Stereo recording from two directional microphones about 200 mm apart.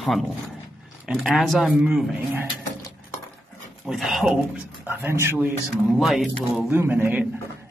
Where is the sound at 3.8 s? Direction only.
Centre (ahead or behind).